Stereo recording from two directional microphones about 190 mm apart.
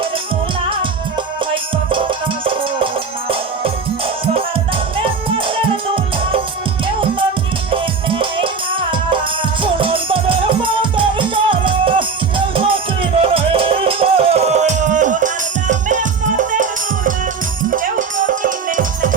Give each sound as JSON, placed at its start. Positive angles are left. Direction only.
{"t": 1.9, "sound": "music", "side_deg": -25}
{"t": 4.9, "sound": "music", "side_deg": -30}
{"t": 7.7, "sound": "music", "side_deg": -30}
{"t": 18.3, "sound": "music", "side_deg": -45}